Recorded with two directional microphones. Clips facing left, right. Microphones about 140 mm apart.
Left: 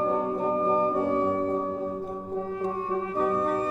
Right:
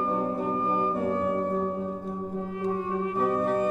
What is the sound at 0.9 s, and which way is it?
Music, 30° left (ahead or behind).